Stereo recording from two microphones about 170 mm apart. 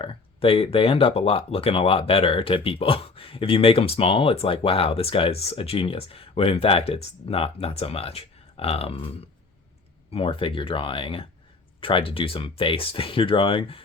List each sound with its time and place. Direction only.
0.0 s speech: 30° left (ahead or behind)